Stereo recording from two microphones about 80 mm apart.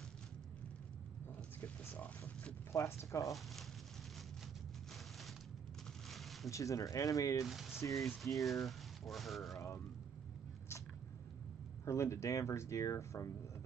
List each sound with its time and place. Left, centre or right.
1.6 s a sound: left
2.7 s speech: left
6.0 s a sound: centre
6.5 s speech: left
7.4 s speech: centre
11.8 s speech: left